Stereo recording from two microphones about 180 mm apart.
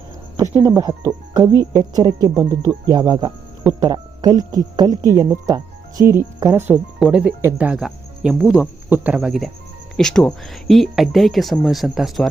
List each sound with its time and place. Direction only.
0.6 s speech: 20° right (ahead or behind); by 12.3 s centre (ahead or behind)